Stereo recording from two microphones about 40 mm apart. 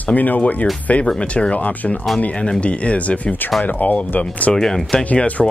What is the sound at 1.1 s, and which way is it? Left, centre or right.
Speech, left.